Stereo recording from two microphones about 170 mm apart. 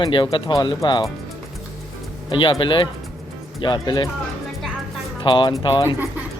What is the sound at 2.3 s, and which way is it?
Speech, 30° left (ahead or behind).